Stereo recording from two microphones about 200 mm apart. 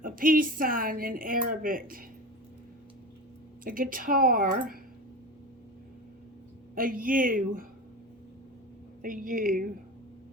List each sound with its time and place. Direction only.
0.0 s a woman's voice: 45° right (ahead or behind)
3.6 s a woman's voice: 45° right (ahead or behind)
6.7 s a woman's voice: 45° right (ahead or behind)
9.0 s a woman's voice: 45° right (ahead or behind)